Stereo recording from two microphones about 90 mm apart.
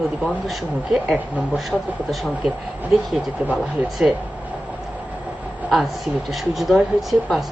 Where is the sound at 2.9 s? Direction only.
Centre (ahead or behind).